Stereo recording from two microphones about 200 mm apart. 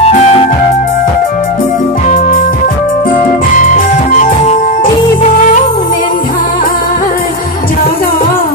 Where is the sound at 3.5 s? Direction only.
40° left (ahead or behind).